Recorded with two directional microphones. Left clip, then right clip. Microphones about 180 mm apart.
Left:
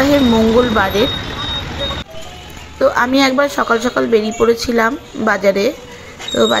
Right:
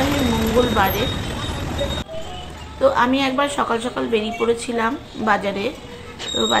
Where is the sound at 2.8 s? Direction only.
45° left (ahead or behind).